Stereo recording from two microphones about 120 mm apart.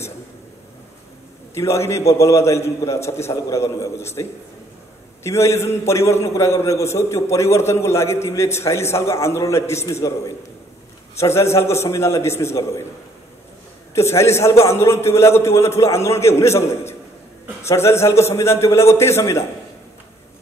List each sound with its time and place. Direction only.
1.5 s a man's voice: 25° left (ahead or behind)
13.9 s a man's voice: 20° left (ahead or behind)